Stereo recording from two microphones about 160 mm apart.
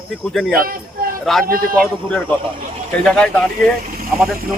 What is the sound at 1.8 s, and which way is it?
Speech, 5° left (ahead or behind).